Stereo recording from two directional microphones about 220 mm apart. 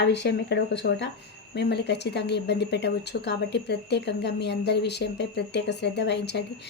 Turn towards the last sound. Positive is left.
turn(degrees=50)  # may be behind; listen again after turning